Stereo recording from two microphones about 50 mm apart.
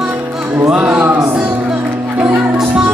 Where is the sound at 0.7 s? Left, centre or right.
Right.